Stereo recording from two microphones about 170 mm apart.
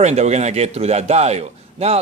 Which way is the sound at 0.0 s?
40° right (ahead or behind).